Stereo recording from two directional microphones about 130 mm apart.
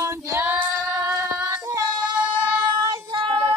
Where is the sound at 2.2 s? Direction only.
10° right (ahead or behind).